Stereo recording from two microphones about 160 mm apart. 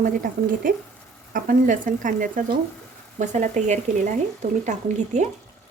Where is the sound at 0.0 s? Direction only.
55° right (ahead or behind).